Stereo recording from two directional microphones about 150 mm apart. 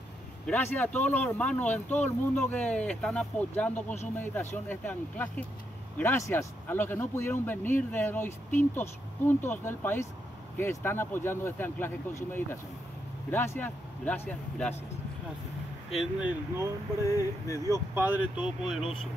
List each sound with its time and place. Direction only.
0.5 s speech: 10° left (ahead or behind)
15.9 s speech: 5° right (ahead or behind)
17.0 s speech: 20° left (ahead or behind)
17.9 s speech: 10° right (ahead or behind)